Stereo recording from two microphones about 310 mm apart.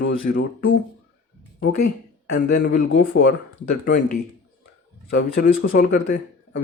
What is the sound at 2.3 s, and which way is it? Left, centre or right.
Speech, left.